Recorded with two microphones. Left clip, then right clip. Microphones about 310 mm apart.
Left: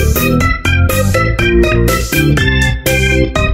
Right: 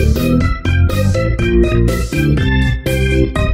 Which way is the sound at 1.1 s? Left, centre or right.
Left.